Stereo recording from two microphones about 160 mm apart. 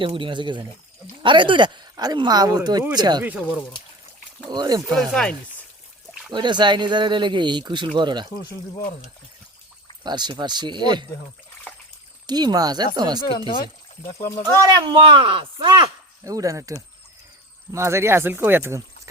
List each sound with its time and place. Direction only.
0.0 s speech: 30° right (ahead or behind)
4.5 s speech: 25° right (ahead or behind)
4.9 s speech: 5° left (ahead or behind)
6.3 s speech: 30° right (ahead or behind)
10.0 s speech: 25° right (ahead or behind)
11.7 s a sound: 10° left (ahead or behind)
12.2 s speech: 25° right (ahead or behind)
14.3 s speech: 15° left (ahead or behind)
14.6 s speech: 25° right (ahead or behind)